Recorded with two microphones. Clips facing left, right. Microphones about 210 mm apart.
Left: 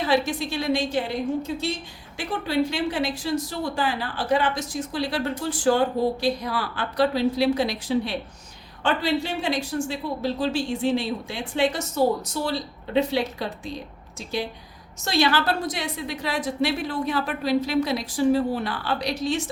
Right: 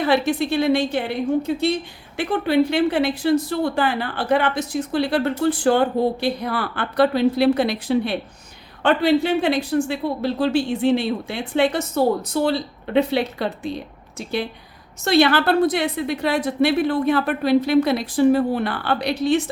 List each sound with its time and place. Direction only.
0.0 s a woman's voice: 60° right (ahead or behind)